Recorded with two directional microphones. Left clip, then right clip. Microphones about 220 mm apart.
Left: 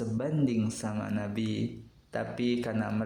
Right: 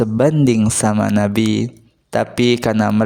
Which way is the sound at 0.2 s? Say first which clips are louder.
Right 16 dB; 50° right (ahead or behind).